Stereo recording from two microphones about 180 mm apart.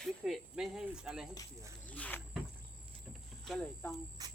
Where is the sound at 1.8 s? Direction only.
10° left (ahead or behind).